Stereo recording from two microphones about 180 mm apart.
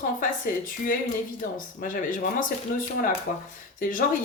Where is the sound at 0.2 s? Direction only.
50° left (ahead or behind).